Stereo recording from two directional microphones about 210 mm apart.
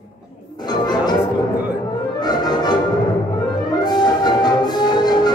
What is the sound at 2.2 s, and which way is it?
Brass instrument, 20° left (ahead or behind).